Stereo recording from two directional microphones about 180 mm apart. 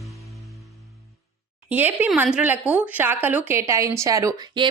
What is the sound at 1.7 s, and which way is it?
Speech, 10° right (ahead or behind).